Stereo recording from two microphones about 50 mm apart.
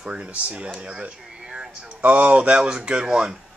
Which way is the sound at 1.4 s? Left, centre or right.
Centre.